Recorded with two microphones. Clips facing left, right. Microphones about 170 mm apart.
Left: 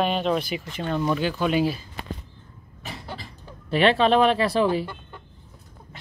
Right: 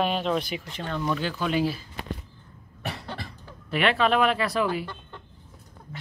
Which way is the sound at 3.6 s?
30° left (ahead or behind).